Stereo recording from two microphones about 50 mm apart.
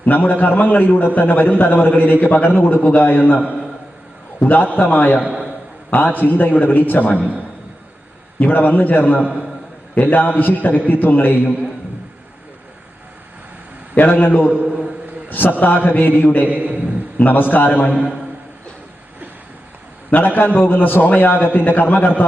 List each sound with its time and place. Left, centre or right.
0.0 s a man's voice: left
4.4 s a man's voice: left
5.2 s a man's voice: centre
5.9 s a man's voice: left
7.2 s a man's voice: right
8.4 s a man's voice: left
13.9 s a man's voice: left
16.5 s a man's voice: right
17.2 s a man's voice: left
17.9 s a man's voice: centre
20.1 s a man's voice: left